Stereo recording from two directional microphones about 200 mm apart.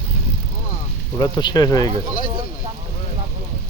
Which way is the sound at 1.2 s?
20° left (ahead or behind).